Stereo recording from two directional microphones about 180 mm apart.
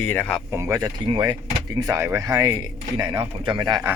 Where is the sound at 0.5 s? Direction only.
15° right (ahead or behind).